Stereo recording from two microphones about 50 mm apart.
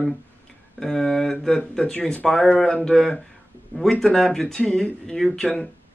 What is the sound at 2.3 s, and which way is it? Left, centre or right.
Speech, centre.